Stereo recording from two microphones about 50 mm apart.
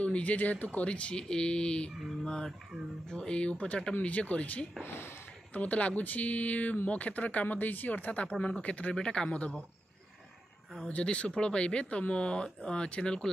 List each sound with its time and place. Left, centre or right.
0.0 s speech: left
10.9 s speech: left